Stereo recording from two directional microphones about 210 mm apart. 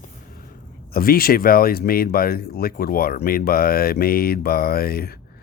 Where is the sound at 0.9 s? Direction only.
45° left (ahead or behind).